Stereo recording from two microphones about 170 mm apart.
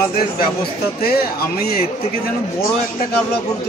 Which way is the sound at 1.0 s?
65° left (ahead or behind).